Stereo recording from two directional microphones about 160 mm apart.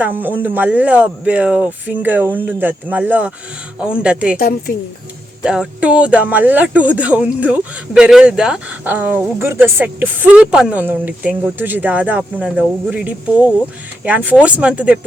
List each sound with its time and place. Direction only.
0.0 s speech: 10° right (ahead or behind)
4.4 s a woman's voice: 70° left (ahead or behind)
5.4 s speech: 5° right (ahead or behind)